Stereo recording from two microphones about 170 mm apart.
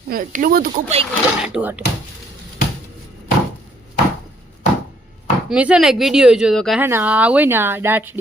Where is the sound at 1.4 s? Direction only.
10° right (ahead or behind).